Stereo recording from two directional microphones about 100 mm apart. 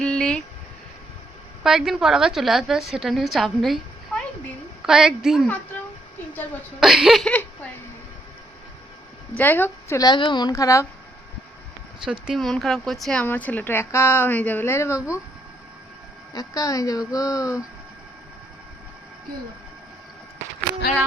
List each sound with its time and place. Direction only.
0.0 s a sound: 10° left (ahead or behind)
1.6 s a woman's voice: 5° right (ahead or behind)
6.7 s a woman's voice: 5° right (ahead or behind)
7.3 s a sound: 15° left (ahead or behind)
9.4 s a woman's voice: 20° left (ahead or behind)
10.0 s a woman's voice: 50° left (ahead or behind)
10.5 s speech: 30° left (ahead or behind)
12.0 s speech: 5° right (ahead or behind)
12.4 s a woman's voice: 5° left (ahead or behind)
13.2 s a woman's voice: 20° left (ahead or behind)
16.3 s speech: 40° left (ahead or behind)